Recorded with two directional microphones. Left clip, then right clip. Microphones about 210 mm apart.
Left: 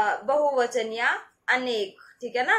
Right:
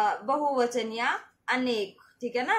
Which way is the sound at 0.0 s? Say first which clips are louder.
Left 3 dB; 20° right (ahead or behind).